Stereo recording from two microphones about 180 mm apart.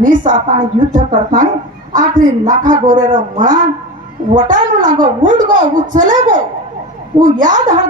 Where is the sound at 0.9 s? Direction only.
45° right (ahead or behind).